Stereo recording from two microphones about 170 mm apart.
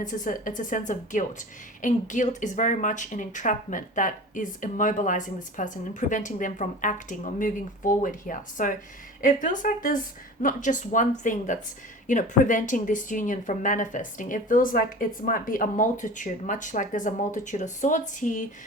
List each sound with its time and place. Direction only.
0.0 s a woman's voice: 50° left (ahead or behind)